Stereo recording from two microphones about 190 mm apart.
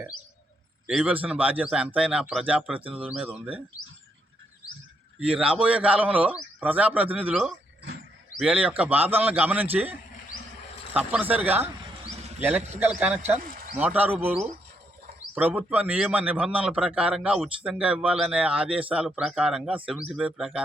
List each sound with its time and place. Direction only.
0.9 s a man's voice: 5° right (ahead or behind)
5.2 s a man's voice: 5° right (ahead or behind)
10.9 s a man's voice: 10° right (ahead or behind)
13.4 s a sound: 50° right (ahead or behind)
13.7 s a man's voice: 10° right (ahead or behind)
15.4 s a man's voice: 10° right (ahead or behind)